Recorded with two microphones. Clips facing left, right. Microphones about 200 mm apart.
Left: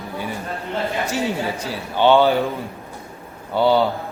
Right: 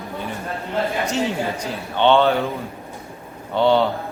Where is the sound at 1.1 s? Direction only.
10° left (ahead or behind).